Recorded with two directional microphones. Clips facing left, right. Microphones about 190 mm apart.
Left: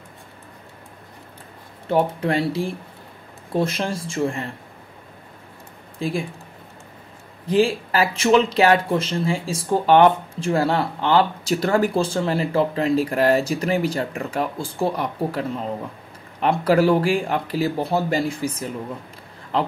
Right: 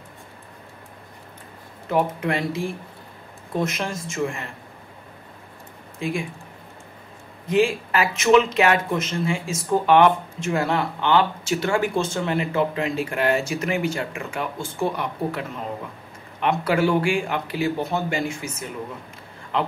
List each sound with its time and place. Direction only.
1.9 s speech: 35° left (ahead or behind)
5.9 s speech: 35° left (ahead or behind)
7.4 s speech: 35° left (ahead or behind)